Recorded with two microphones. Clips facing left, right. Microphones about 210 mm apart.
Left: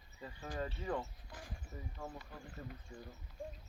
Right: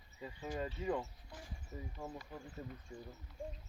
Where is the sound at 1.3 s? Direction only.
90° left.